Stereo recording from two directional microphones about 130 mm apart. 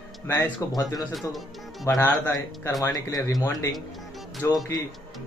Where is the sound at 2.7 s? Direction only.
30° left (ahead or behind).